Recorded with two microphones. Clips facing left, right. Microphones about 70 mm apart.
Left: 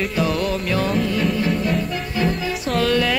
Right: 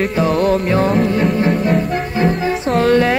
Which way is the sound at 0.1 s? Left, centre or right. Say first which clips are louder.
Right 6 dB; right.